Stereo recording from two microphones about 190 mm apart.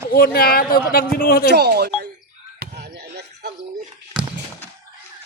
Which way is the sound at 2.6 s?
60° right (ahead or behind).